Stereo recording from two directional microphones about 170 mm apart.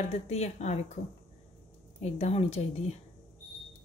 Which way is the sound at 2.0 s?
40° left (ahead or behind).